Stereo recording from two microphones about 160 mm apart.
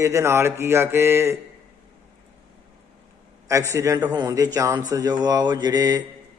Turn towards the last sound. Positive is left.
turn(degrees=-25)  # may be behind; listen again after turning